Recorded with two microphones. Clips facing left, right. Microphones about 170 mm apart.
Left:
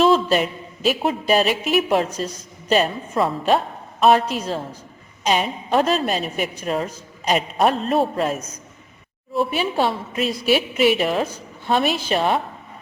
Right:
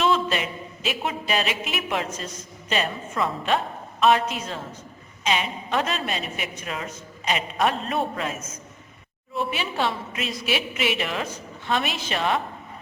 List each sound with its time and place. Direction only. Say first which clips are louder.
0.0 s a man's voice: left 6 dB; 35° left (ahead or behind)